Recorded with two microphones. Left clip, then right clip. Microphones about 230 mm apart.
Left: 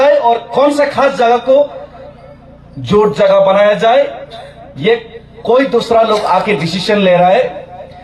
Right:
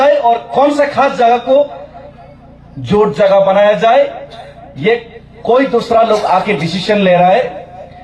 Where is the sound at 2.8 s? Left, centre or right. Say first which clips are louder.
Left 1 dB; left.